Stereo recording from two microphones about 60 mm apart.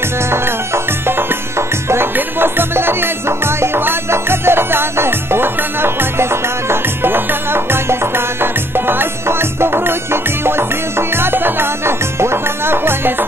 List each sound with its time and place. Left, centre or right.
2.1 s music: right
11.0 s music: right